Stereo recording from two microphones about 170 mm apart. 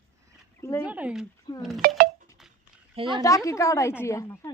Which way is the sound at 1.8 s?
60° right (ahead or behind).